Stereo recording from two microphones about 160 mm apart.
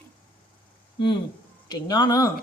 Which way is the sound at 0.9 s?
30° left (ahead or behind).